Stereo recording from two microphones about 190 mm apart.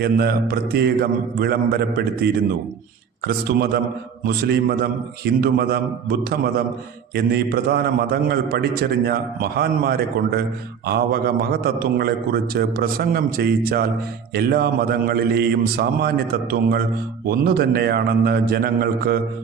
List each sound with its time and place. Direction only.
0.0 s a man's voice: 55° right (ahead or behind)